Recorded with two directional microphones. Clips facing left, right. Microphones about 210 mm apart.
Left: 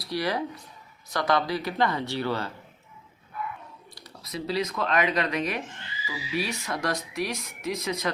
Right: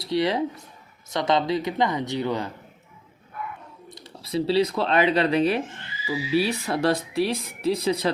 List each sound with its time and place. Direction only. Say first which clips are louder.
0.0 s speech: right 5 dB; 25° right (ahead or behind)
3.9 s speech: right 10 dB; 25° right (ahead or behind)